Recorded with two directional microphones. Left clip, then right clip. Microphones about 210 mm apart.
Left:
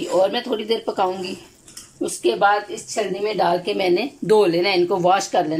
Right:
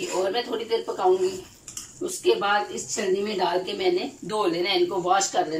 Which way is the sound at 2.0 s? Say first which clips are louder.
Left 5 dB; 50° left (ahead or behind).